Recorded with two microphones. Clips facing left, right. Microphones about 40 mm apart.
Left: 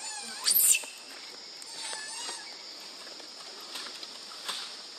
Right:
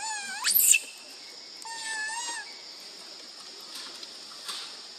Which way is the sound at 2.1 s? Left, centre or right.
Right.